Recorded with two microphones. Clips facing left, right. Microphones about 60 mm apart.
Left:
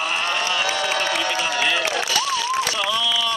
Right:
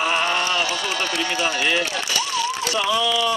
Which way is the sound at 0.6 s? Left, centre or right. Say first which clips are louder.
Left 2 dB; left.